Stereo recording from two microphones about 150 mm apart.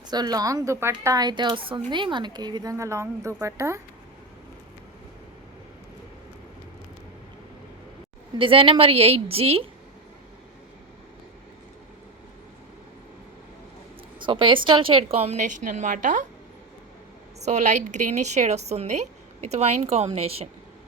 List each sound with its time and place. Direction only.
0.1 s a woman's voice: 25° right (ahead or behind)
8.4 s a woman's voice: 35° right (ahead or behind)
14.2 s a woman's voice: 35° right (ahead or behind); by 16.2 s 60° right (ahead or behind)
17.4 s a woman's voice: 50° right (ahead or behind)